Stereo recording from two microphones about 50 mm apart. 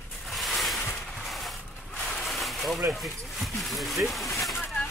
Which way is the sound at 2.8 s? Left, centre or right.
Centre.